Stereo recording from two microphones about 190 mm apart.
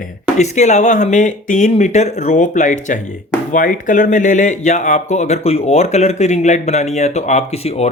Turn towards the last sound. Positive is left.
turn(degrees=35)  # may be behind; listen again after turning